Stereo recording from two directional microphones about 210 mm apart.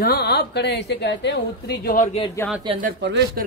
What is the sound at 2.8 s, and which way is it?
Speech, 55° right (ahead or behind).